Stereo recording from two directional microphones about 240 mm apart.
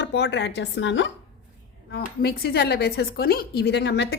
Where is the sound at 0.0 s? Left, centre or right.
Left.